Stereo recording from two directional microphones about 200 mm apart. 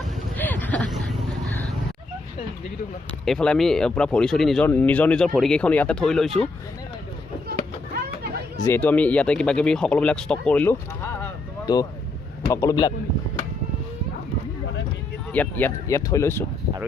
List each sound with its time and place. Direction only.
0.3 s a sound: 10° left (ahead or behind)
3.2 s speech: 5° left (ahead or behind)
8.5 s speech: 15° left (ahead or behind)
11.6 s speech: 20° left (ahead or behind)
15.3 s speech: 10° left (ahead or behind)